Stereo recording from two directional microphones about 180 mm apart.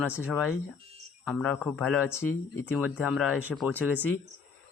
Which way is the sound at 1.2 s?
5° left (ahead or behind).